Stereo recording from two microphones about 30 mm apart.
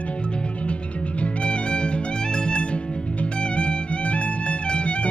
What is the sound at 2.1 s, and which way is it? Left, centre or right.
Music, left.